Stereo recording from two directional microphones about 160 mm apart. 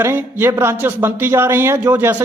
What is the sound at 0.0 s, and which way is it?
A man's voice, 15° right (ahead or behind).